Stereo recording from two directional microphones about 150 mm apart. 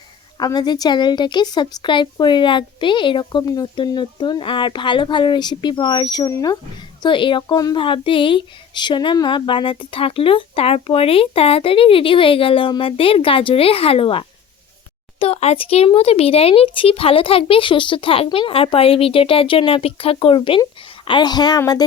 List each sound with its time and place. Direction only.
0.3 s a woman's voice: 25° left (ahead or behind)